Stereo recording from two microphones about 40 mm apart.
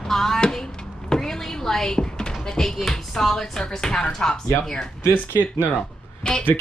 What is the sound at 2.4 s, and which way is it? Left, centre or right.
Speech, centre.